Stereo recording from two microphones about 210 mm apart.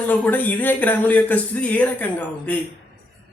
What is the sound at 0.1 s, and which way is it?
Speech, 10° left (ahead or behind).